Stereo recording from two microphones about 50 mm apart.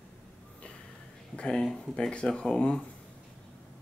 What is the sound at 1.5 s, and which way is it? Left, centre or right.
Speech, centre.